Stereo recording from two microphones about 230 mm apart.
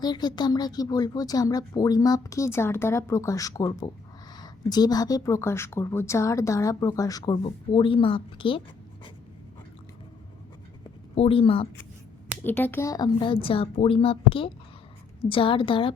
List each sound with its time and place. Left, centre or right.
0.0 s speech: centre
11.1 s speech: left
12.5 s speech: centre